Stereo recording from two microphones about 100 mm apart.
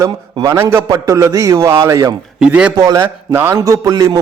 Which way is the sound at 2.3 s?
10° right (ahead or behind).